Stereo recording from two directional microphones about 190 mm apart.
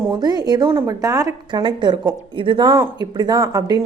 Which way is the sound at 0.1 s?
20° right (ahead or behind).